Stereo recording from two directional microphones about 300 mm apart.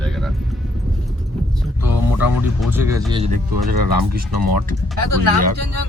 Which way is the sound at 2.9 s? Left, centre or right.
Centre.